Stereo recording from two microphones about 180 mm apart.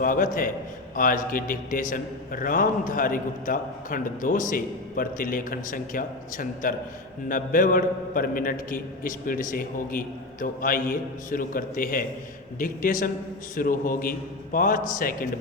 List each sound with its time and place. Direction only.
0.0 s a man's voice: 50° left (ahead or behind)